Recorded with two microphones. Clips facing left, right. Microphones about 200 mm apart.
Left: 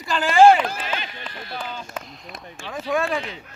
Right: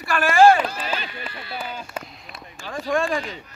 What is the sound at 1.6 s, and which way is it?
Speech, 10° right (ahead or behind).